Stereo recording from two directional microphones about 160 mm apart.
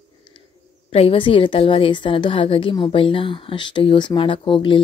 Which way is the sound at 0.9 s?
35° left (ahead or behind).